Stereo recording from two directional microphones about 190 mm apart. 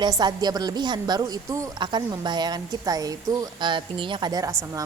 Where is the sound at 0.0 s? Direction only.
20° right (ahead or behind).